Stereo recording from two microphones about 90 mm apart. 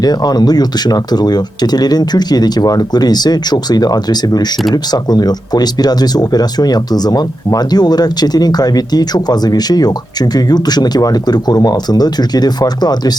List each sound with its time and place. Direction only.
0.0 s speech: 45° left (ahead or behind)